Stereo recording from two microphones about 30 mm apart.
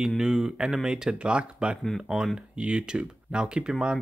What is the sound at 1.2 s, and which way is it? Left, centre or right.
Speech, right.